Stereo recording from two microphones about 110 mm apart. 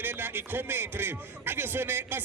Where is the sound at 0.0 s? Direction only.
20° right (ahead or behind).